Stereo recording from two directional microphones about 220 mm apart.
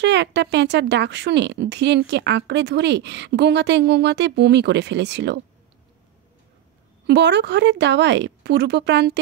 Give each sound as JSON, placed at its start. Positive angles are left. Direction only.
{"t": 0.0, "sound": "speech", "side_deg": -50}
{"t": 7.1, "sound": "speech", "side_deg": -50}